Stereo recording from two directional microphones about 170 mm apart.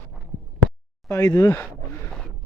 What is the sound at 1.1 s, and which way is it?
Speech, 20° left (ahead or behind).